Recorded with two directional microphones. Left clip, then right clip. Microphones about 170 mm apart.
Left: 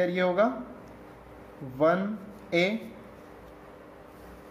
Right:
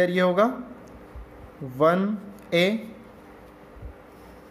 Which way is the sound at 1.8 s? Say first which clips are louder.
Right 4 dB; 30° right (ahead or behind).